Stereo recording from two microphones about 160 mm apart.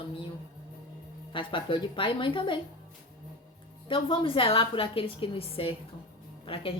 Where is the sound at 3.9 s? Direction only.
35° left (ahead or behind).